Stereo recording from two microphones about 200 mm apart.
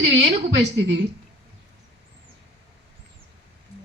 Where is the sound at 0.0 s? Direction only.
60° right (ahead or behind).